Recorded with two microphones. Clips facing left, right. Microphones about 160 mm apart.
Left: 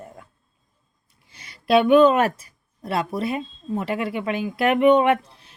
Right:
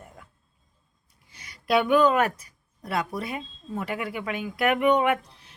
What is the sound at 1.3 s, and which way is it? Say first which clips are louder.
A woman's voice: left 5 dB; 25° left (ahead or behind).